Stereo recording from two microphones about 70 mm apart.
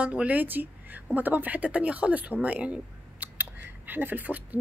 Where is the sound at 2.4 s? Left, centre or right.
Centre.